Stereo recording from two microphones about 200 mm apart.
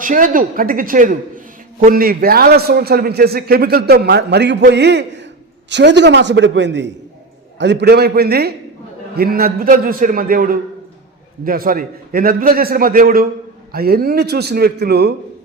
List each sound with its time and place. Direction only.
0.0 s a man's voice: 40° right (ahead or behind)